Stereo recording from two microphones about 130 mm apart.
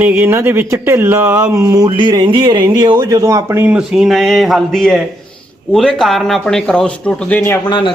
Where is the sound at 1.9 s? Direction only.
40° right (ahead or behind); by 7.6 s 15° left (ahead or behind).